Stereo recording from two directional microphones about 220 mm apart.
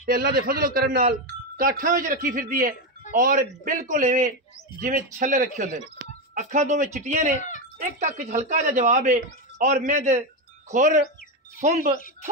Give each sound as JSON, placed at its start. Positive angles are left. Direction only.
{"t": 0.0, "sound": "speech", "side_deg": -40}